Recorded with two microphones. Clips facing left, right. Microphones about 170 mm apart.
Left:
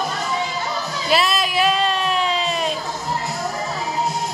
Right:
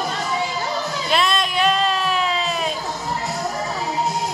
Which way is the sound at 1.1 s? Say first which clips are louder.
Left 1 dB; 5° left (ahead or behind).